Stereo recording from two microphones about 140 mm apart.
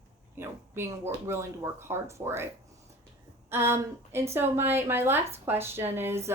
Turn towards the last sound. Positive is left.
turn(degrees=-15)  # may be behind; listen again after turning